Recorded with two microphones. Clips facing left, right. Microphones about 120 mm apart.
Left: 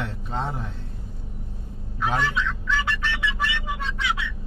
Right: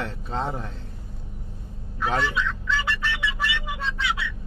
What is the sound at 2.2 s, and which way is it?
Speech, 15° left (ahead or behind).